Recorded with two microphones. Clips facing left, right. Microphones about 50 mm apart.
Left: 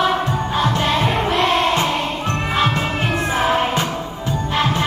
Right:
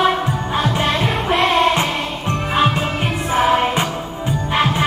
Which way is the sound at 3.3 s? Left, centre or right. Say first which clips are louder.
Right 4 dB; centre.